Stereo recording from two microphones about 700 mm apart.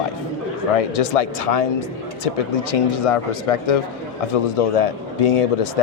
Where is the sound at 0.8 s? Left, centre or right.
Left.